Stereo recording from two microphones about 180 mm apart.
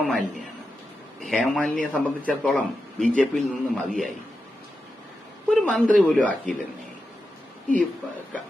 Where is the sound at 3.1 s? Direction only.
5° left (ahead or behind).